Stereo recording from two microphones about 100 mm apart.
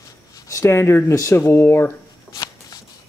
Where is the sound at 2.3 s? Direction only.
40° left (ahead or behind).